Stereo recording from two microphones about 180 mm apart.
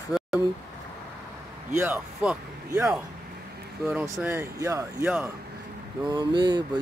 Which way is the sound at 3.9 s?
15° right (ahead or behind).